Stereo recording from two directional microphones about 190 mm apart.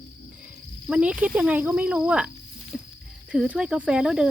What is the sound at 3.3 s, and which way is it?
Speech, 5° right (ahead or behind).